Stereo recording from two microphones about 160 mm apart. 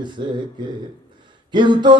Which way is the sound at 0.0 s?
30° right (ahead or behind).